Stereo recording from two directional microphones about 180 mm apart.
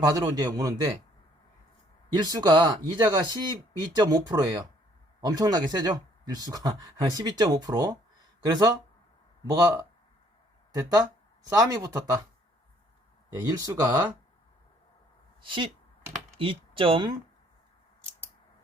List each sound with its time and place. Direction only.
0.0 s speech: 20° right (ahead or behind)
2.1 s speech: 20° right (ahead or behind)
13.5 s speech: 20° right (ahead or behind)
15.4 s speech: 30° right (ahead or behind)